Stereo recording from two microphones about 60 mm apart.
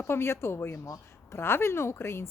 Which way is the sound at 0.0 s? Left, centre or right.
Left.